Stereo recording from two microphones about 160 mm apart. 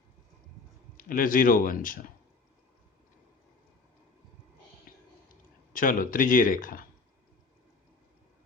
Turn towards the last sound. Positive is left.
turn(degrees=60)  # may be behind; listen again after turning